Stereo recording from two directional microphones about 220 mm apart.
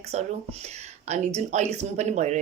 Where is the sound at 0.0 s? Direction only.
30° right (ahead or behind).